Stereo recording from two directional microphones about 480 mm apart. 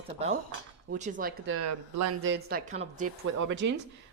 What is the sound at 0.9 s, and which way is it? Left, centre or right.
Speech, centre.